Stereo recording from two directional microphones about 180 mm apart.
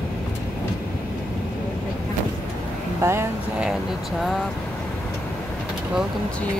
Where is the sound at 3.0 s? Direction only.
15° right (ahead or behind).